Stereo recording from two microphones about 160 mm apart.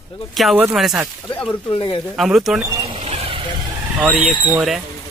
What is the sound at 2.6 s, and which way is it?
Speech, 20° right (ahead or behind).